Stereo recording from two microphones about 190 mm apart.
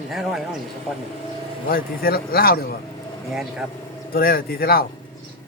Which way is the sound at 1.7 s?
50° left (ahead or behind).